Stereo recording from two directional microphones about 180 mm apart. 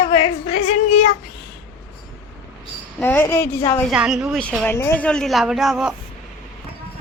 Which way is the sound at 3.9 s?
5° right (ahead or behind).